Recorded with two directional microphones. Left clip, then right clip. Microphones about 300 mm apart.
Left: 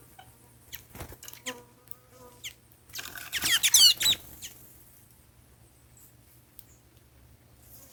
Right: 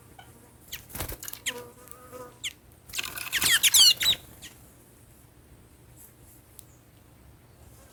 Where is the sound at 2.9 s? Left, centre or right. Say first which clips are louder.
Right 5 dB; centre.